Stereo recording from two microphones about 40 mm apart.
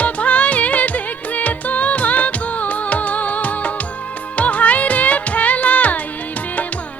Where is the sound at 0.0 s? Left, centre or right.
Left.